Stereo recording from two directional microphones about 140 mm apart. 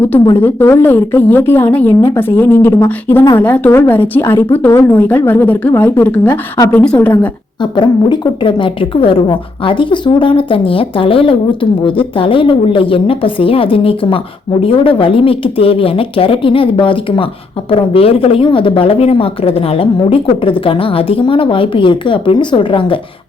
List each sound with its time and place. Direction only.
0.3 s a woman's voice: 15° left (ahead or behind)
7.6 s a woman's voice: 35° left (ahead or behind)